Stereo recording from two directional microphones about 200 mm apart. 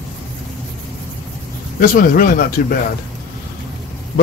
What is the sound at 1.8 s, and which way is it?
Speech, 45° left (ahead or behind).